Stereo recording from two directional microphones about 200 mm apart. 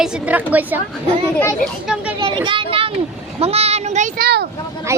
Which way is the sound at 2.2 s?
25° right (ahead or behind).